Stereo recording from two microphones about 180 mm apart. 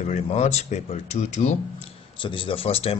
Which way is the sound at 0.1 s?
35° left (ahead or behind).